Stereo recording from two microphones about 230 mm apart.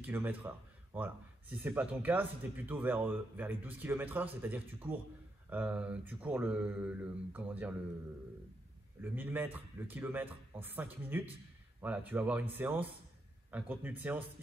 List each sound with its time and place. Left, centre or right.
0.0 s speech: centre
9.0 s speech: centre